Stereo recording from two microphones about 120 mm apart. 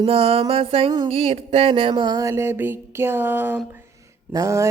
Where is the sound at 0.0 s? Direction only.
50° right (ahead or behind); by 3.6 s 15° right (ahead or behind).